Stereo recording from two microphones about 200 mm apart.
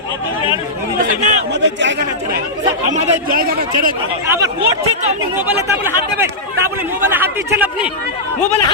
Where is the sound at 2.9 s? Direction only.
40° right (ahead or behind).